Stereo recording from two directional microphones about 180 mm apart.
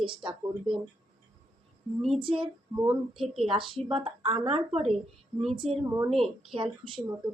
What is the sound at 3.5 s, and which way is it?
A woman's voice, 30° right (ahead or behind).